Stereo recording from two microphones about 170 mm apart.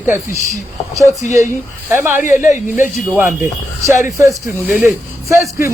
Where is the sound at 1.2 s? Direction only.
45° left (ahead or behind).